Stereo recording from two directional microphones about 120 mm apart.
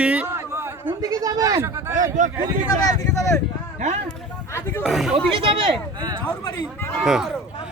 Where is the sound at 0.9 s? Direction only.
30° right (ahead or behind).